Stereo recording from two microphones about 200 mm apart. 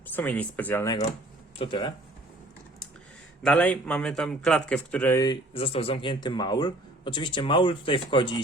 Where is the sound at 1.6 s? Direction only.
25° left (ahead or behind).